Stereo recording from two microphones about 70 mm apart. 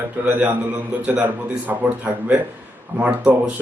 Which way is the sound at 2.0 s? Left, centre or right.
Centre.